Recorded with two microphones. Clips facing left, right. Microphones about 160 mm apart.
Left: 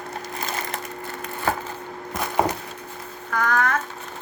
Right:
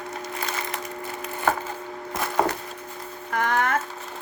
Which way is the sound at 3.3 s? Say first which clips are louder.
Left 1 dB; 25° right (ahead or behind).